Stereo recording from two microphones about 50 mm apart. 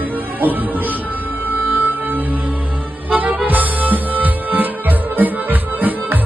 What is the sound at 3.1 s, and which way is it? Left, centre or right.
Music, right.